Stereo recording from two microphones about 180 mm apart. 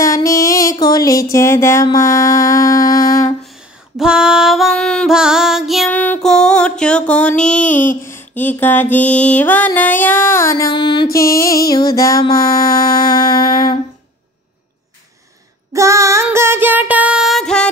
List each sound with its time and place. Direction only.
0.0 s a sound: 20° left (ahead or behind)
3.4 s female singing: 5° right (ahead or behind)
8.0 s music: 15° left (ahead or behind)
11.1 s music: 55° left (ahead or behind)
11.6 s music: 20° left (ahead or behind)
15.7 s female singing: 15° right (ahead or behind); by 17.6 s 5° left (ahead or behind)